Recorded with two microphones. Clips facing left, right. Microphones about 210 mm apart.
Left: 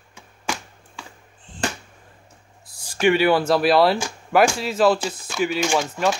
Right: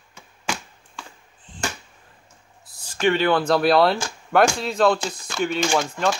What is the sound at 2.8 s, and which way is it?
Speech, 10° left (ahead or behind).